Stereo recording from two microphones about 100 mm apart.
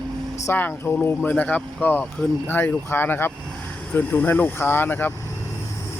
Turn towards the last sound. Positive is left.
turn(degrees=20)  # may be behind; listen again after turning